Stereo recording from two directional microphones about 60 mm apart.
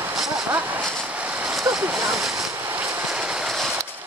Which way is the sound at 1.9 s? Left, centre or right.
Centre.